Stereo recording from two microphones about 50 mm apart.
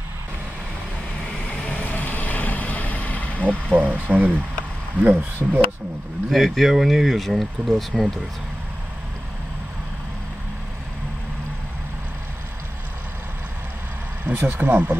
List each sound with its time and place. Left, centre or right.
1.4 s vehicle: left
3.6 s speech: right
6.3 s speech: centre
14.2 s speech: right